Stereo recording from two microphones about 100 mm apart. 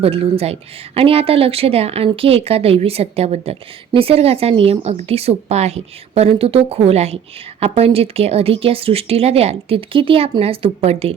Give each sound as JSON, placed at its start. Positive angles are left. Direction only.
{"t": 0.0, "sound": "speech", "side_deg": -80}
{"t": 2.0, "sound": "speech", "side_deg": -70}
{"t": 3.9, "sound": "speech", "side_deg": -75}